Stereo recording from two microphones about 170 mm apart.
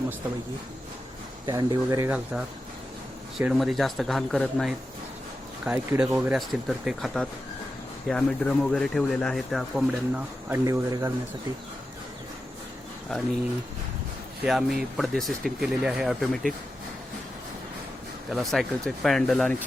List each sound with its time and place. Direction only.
1.5 s speech: 25° right (ahead or behind); by 10.6 s 5° right (ahead or behind)
10.6 s speech: 20° right (ahead or behind)
14.4 s speech: centre (ahead or behind)
18.3 s speech: centre (ahead or behind)